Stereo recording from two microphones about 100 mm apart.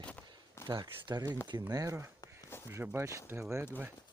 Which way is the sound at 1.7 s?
35° right (ahead or behind).